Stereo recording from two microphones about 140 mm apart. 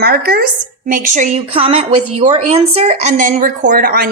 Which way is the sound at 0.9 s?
65° right (ahead or behind).